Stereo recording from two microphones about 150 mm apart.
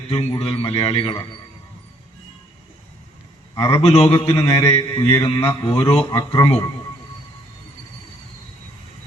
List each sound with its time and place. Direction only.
0.1 s a man's voice: 40° left (ahead or behind)
3.7 s a man's voice: 40° left (ahead or behind)
4.3 s mantra: 20° left (ahead or behind)
5.0 s a man's voice: 35° left (ahead or behind)
6.1 s mantra: 25° left (ahead or behind)